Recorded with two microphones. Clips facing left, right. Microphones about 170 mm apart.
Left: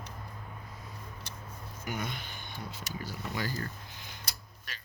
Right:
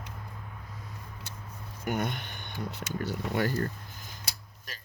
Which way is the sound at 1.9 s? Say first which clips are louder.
Right 6 dB; 60° right (ahead or behind).